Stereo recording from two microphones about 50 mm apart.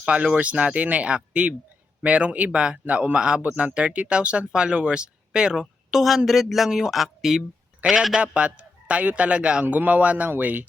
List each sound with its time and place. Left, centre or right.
0.0 s a man's voice: right
8.2 s speech: right
10.2 s speech: right